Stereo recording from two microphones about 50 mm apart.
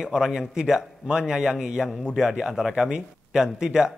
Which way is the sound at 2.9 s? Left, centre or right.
Centre.